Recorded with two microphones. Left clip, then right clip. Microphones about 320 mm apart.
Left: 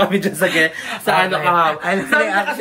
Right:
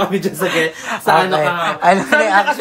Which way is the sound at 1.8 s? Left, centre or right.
Centre.